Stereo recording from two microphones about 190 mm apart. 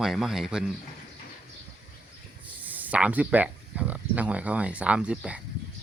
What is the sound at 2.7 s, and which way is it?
Speech, 10° right (ahead or behind).